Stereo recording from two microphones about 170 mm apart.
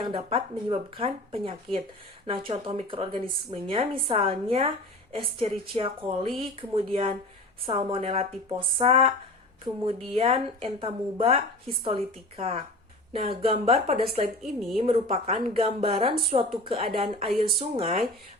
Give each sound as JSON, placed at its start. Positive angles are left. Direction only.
{"t": 0.0, "sound": "a woman's voice", "side_deg": -35}
{"t": 14.4, "sound": "a woman's voice", "side_deg": 0}
{"t": 14.8, "sound": "a woman's voice", "side_deg": -35}